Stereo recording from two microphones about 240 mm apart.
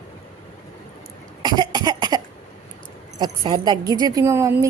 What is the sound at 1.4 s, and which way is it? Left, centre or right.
Cough, centre.